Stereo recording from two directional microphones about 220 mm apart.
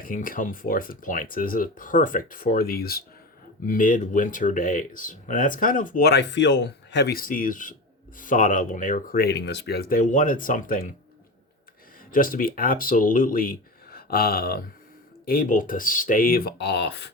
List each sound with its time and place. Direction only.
0.0 s speech: 40° left (ahead or behind)
12.1 s speech: 40° left (ahead or behind)